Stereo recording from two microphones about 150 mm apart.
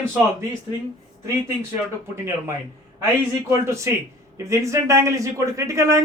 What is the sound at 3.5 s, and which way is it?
Speech, 20° right (ahead or behind).